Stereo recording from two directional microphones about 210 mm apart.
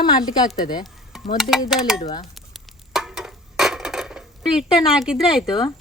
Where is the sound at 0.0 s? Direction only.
20° left (ahead or behind).